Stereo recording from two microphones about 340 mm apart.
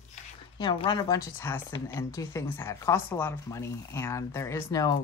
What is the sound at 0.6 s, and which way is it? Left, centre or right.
Speech, centre.